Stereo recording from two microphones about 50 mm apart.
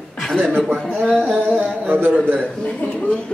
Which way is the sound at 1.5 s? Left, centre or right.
Right.